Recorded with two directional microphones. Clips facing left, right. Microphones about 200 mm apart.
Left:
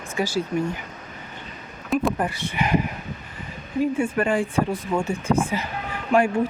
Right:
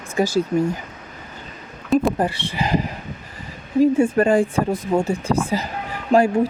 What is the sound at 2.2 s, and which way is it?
Speech, 30° right (ahead or behind).